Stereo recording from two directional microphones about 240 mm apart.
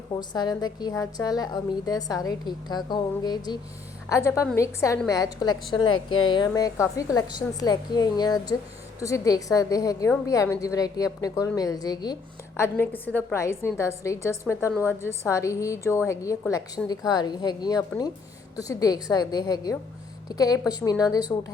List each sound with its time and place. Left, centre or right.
0.2 s a woman's voice: centre